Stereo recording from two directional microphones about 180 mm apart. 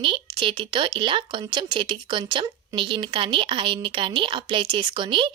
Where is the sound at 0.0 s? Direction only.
30° right (ahead or behind).